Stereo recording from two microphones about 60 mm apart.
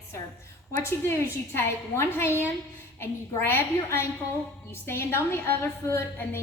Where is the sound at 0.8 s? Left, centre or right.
Left.